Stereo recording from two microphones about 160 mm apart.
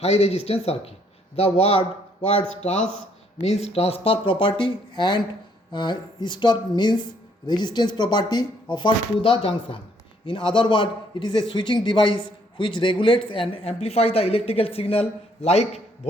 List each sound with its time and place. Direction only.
0.0 s a man's voice: 40° left (ahead or behind)
3.4 s a man's voice: 40° left (ahead or behind)